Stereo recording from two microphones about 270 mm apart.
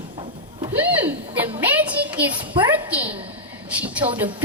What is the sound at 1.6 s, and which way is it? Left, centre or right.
Speech, centre.